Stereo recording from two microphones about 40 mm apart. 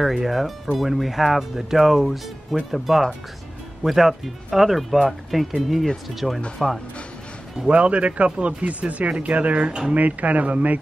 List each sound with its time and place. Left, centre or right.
0.0 s speech: centre
7.7 s speech: right